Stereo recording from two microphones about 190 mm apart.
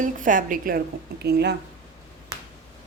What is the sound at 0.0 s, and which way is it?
Speech, 45° right (ahead or behind).